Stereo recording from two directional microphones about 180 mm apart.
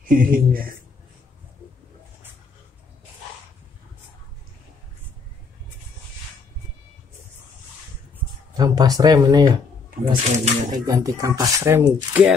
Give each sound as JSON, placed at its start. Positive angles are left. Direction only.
{"t": 0.0, "sound": "speech", "side_deg": -50}
{"t": 8.5, "sound": "speech", "side_deg": -20}
{"t": 10.0, "sound": "speech", "side_deg": -45}
{"t": 10.9, "sound": "speech", "side_deg": -20}